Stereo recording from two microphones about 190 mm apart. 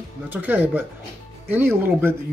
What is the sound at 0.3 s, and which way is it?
Speech, 10° right (ahead or behind).